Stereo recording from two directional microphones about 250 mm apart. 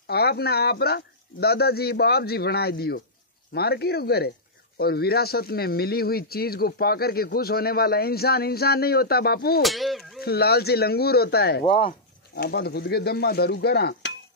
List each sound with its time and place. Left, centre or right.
0.0 s speech: left
9.6 s speech: centre
10.2 s speech: left
11.6 s speech: left
12.4 s speech: left